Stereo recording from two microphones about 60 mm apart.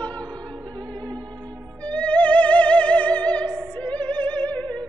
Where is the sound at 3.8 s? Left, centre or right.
Left.